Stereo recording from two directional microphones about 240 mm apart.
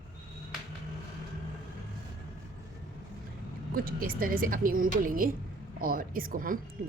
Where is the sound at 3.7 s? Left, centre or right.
Right.